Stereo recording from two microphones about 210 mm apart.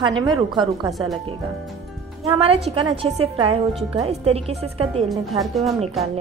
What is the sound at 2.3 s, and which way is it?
A woman's voice, 30° right (ahead or behind).